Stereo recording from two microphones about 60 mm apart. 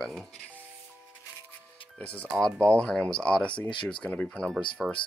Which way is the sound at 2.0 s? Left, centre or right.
Left.